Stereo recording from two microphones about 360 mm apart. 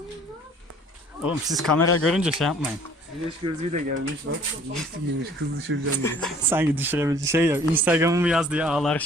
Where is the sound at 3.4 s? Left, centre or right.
Centre.